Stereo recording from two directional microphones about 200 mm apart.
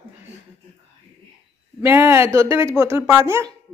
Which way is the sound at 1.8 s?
10° right (ahead or behind).